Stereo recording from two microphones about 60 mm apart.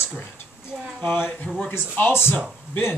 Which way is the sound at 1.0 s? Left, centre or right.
Left.